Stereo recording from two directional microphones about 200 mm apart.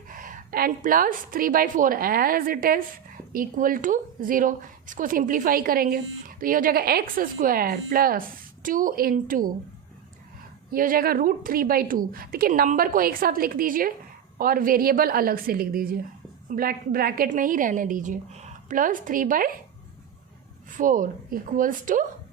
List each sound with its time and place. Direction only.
0.1 s a woman's voice: 45° right (ahead or behind)
10.7 s a woman's voice: 45° right (ahead or behind)
20.7 s a woman's voice: 40° right (ahead or behind)